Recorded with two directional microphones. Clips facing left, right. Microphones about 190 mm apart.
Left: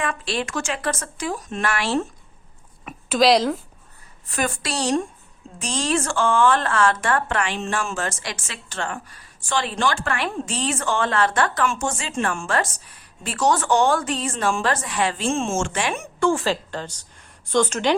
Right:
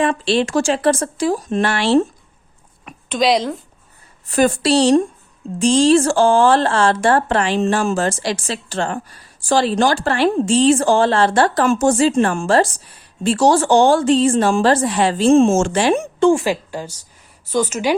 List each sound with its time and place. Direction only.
0.0 s speech: 30° right (ahead or behind)
2.8 s a woman's voice: centre (ahead or behind)
4.4 s speech: 35° right (ahead or behind)
16.2 s a woman's voice: 15° right (ahead or behind)